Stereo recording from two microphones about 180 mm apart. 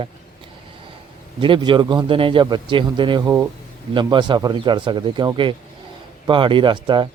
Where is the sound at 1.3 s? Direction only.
25° right (ahead or behind).